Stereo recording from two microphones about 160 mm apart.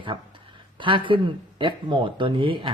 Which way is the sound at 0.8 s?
30° right (ahead or behind).